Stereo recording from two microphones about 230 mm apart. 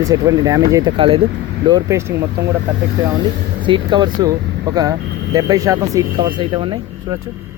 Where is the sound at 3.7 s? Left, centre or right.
Centre.